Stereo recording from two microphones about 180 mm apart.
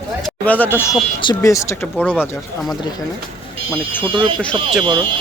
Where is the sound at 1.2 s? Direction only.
20° left (ahead or behind).